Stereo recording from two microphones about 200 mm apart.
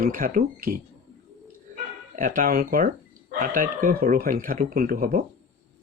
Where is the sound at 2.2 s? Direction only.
45° right (ahead or behind).